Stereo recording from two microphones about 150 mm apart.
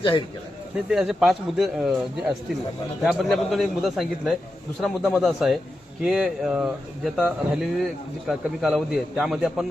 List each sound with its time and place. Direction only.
0.0 s a man's voice: 35° left (ahead or behind)
0.9 s speech: 5° right (ahead or behind)